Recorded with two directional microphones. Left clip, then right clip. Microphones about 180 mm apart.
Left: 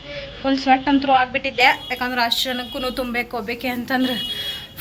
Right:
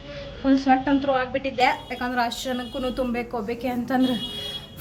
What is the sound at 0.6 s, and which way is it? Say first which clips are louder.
A woman's voice: left 6 dB; centre (ahead or behind).